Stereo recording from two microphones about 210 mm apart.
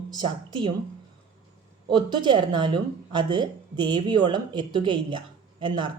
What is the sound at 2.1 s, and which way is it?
A woman's voice, 20° right (ahead or behind).